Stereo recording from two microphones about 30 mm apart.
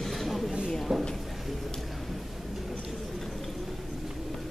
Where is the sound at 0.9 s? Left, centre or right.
Right.